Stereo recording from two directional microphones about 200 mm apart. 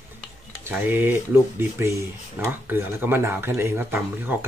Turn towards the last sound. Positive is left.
turn(degrees=-10)  # may be behind; listen again after turning